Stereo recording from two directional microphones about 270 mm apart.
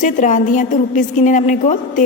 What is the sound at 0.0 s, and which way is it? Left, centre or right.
A woman's voice, left.